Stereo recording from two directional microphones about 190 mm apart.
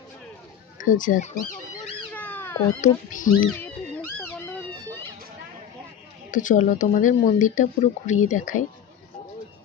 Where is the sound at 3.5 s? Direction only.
10° left (ahead or behind).